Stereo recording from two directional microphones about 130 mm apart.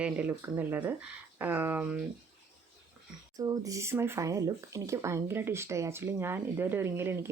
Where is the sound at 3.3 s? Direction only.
25° right (ahead or behind).